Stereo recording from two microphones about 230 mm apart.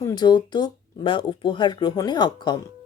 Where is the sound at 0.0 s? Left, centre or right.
Centre.